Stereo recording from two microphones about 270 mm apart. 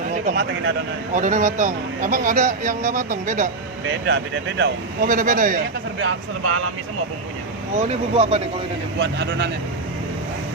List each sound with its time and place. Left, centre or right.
0.1 s a sound: right
1.1 s speech: right
4.0 s speech: right
6.1 s speech: right
7.8 s speech: right
9.0 s speech: right